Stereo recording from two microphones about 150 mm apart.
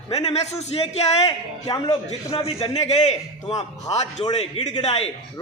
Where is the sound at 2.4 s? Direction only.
40° left (ahead or behind).